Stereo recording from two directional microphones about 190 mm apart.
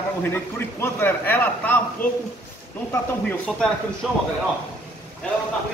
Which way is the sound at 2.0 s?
45° left (ahead or behind).